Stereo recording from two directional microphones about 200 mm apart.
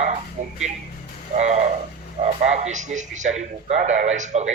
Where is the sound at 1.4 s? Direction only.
35° right (ahead or behind).